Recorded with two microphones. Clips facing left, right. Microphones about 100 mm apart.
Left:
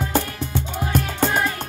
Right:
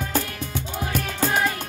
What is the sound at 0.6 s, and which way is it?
Music, 5° right (ahead or behind).